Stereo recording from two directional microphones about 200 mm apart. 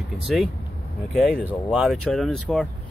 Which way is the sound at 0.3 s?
Centre (ahead or behind).